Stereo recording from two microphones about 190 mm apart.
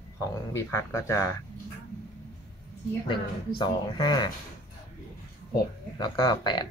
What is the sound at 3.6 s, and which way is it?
Speech, 25° left (ahead or behind).